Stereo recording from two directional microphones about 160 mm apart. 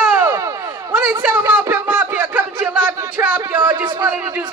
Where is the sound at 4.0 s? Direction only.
10° right (ahead or behind).